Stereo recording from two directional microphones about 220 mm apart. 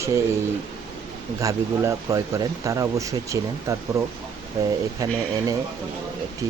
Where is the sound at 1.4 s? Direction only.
15° right (ahead or behind).